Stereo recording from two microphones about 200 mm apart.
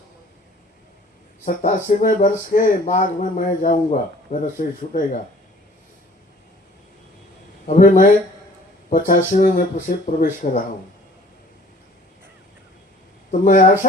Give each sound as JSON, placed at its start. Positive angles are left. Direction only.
{"t": 1.5, "sound": "speech", "side_deg": 40}
{"t": 7.7, "sound": "speech", "side_deg": 40}
{"t": 13.3, "sound": "speech", "side_deg": 40}